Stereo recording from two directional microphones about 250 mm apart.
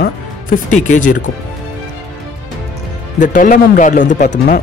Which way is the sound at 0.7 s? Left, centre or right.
Left.